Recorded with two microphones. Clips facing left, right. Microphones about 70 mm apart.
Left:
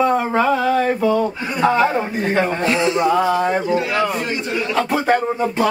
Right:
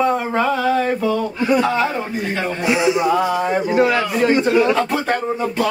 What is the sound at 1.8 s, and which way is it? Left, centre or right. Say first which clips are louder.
Speech: left 3 dB; left.